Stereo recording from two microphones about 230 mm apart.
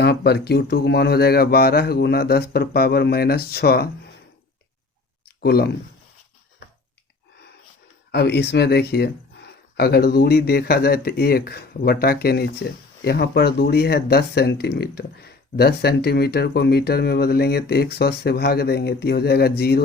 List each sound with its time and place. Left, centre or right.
0.0 s speech: left
5.4 s speech: left
8.1 s speech: left